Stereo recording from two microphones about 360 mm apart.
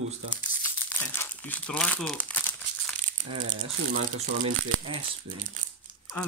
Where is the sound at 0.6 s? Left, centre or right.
Centre.